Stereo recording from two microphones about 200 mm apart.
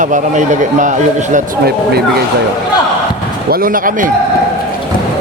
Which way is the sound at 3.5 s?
45° right (ahead or behind).